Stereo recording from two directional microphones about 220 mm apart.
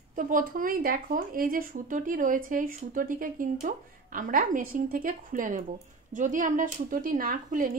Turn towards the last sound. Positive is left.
turn(degrees=-40)  # may be behind; listen again after turning